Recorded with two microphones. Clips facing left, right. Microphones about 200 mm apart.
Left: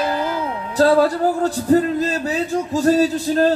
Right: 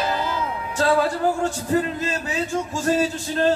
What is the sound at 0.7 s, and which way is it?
Speech, 40° left (ahead or behind).